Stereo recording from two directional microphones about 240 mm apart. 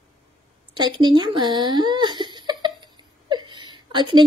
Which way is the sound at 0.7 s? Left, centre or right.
Centre.